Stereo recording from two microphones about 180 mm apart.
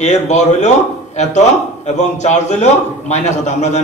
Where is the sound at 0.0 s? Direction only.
40° left (ahead or behind).